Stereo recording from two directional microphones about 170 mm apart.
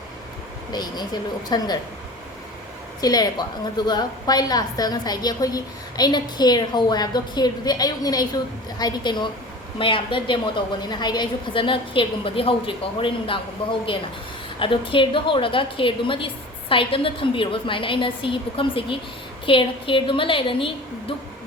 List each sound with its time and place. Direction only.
0.7 s a woman's voice: 25° left (ahead or behind)
3.0 s a woman's voice: 20° left (ahead or behind)